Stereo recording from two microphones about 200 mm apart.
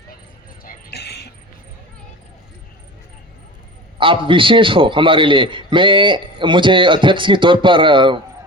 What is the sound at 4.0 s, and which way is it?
A man's voice, 25° right (ahead or behind).